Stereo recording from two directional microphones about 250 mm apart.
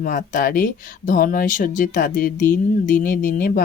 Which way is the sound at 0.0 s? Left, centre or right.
Left.